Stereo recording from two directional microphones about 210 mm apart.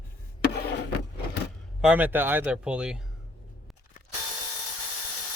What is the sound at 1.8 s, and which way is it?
Speech, 10° right (ahead or behind).